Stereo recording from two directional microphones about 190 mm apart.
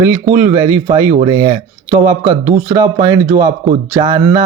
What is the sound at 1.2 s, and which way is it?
Speech, 25° right (ahead or behind).